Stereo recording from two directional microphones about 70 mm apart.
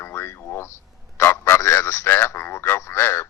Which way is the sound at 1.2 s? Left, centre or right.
Left.